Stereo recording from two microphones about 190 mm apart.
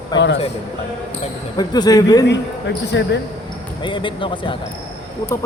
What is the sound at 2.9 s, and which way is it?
Speech, 70° left (ahead or behind).